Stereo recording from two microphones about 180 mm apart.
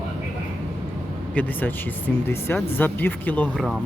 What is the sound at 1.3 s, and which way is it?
Speech, 10° left (ahead or behind).